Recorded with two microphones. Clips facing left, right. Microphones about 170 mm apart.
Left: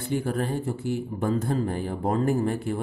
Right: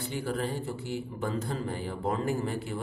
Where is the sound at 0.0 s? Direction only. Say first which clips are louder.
Left 5 dB; 50° left (ahead or behind).